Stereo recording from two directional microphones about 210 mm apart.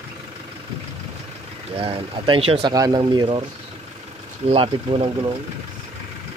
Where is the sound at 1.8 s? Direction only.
25° right (ahead or behind).